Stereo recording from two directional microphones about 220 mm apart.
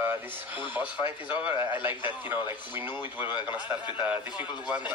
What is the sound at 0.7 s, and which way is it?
A man's voice, 5° right (ahead or behind).